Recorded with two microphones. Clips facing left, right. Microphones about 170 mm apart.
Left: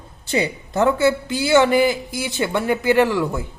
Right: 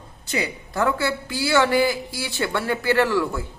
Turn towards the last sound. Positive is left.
turn(degrees=20)  # may be behind; listen again after turning